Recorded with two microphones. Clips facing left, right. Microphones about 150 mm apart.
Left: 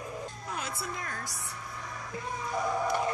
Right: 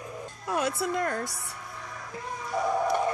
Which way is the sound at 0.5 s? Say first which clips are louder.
Right 11 dB; 65° right (ahead or behind).